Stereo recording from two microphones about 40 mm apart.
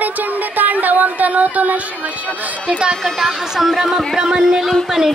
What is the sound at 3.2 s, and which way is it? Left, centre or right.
Speech, centre.